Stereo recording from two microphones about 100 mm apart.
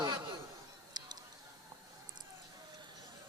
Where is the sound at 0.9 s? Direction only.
45° right (ahead or behind).